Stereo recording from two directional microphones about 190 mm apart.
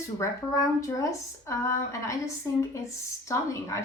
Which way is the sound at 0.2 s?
15° left (ahead or behind).